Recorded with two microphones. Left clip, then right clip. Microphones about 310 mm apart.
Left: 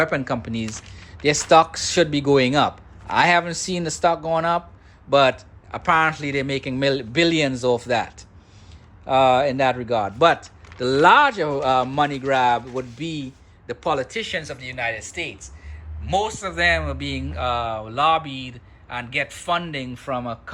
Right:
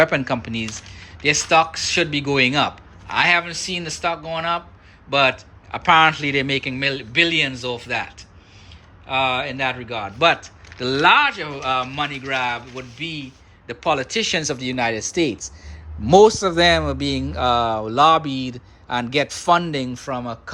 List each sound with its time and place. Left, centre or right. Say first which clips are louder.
0.0 s speech: right 4 dB; centre
13.8 s speech: right 4 dB; centre